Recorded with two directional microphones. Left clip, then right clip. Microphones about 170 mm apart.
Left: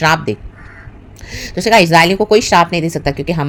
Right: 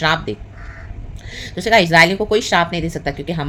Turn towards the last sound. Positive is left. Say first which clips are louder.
# left 6 dB
turn(degrees=35)  # may be behind; listen again after turning